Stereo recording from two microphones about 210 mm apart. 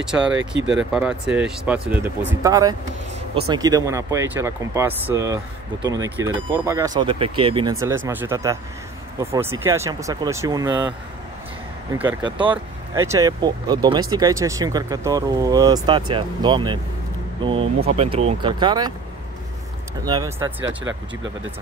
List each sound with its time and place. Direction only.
0.0 s speech: 5° right (ahead or behind); by 7.7 s 25° right (ahead or behind)
8.1 s speech: 10° right (ahead or behind)
12.4 s speech: 25° right (ahead or behind)
20.1 s speech: 15° right (ahead or behind)